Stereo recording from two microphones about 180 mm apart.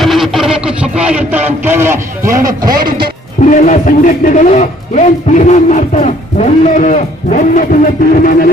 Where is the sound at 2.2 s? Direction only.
50° right (ahead or behind).